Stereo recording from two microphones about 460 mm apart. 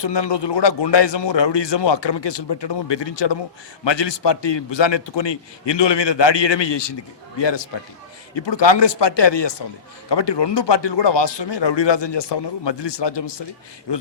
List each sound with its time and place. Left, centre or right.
0.0 s speech: left